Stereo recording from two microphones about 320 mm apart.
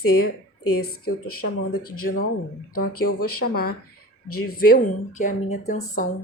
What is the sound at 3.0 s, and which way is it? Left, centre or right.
Speech, left.